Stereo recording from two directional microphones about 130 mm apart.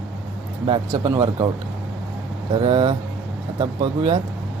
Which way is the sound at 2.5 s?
40° right (ahead or behind).